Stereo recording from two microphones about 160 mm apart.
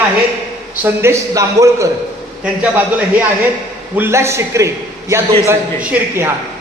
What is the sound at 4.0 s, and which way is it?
A man's voice, 15° right (ahead or behind).